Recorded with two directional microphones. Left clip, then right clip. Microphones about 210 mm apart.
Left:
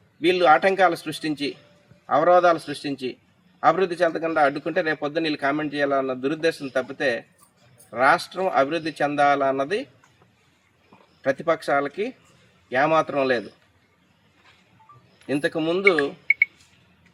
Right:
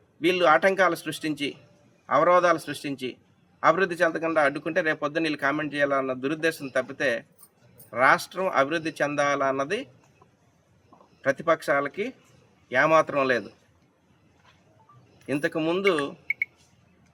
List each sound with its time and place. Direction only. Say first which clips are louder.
0.3 s a man's voice: left 3 dB; 30° right (ahead or behind)
11.2 s a man's voice: left 1 dB; 30° right (ahead or behind)
15.3 s a man's voice: left 2 dB; 30° right (ahead or behind)